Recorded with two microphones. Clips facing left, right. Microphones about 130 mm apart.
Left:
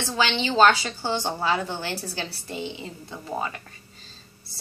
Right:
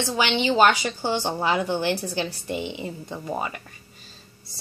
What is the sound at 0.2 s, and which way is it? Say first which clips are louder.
A woman's voice: even; 15° right (ahead or behind).